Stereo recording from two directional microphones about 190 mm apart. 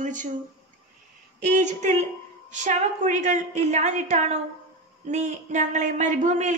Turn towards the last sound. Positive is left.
turn(degrees=-40)  # may be behind; listen again after turning